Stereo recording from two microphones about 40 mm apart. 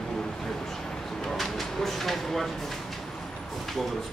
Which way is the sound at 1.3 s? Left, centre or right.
Centre.